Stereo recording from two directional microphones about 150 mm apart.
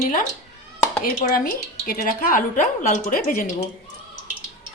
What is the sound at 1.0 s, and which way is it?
A woman's voice, 75° left (ahead or behind).